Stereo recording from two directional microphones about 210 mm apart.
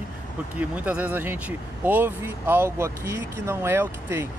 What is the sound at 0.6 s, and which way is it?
Speech, 5° right (ahead or behind).